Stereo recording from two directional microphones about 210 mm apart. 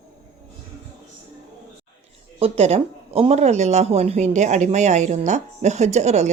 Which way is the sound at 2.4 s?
30° right (ahead or behind).